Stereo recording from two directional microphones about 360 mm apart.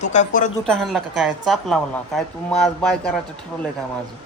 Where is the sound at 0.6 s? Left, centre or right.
Centre.